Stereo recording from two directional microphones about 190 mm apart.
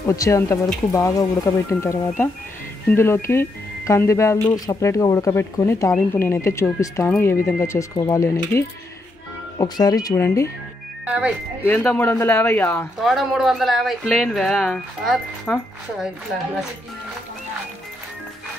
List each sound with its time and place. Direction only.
0.0 s speech: 15° left (ahead or behind)
11.1 s speech: 5° right (ahead or behind)
11.6 s speech: 5° left (ahead or behind)
13.0 s speech: centre (ahead or behind)